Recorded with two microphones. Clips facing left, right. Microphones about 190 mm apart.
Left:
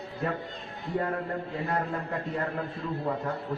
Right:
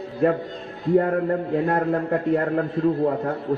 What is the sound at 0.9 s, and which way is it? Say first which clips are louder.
A man's voice: right 10 dB; 60° right (ahead or behind).